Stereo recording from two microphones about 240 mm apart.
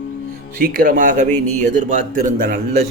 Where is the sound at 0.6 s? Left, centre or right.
Right.